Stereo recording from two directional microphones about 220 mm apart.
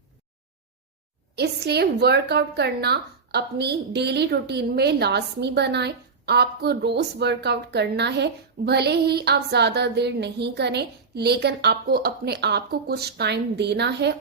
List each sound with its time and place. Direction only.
1.4 s a woman's voice: 50° right (ahead or behind)